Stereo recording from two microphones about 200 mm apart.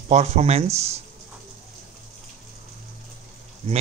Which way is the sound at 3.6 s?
30° right (ahead or behind).